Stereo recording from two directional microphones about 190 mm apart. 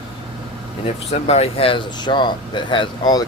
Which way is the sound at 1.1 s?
35° left (ahead or behind).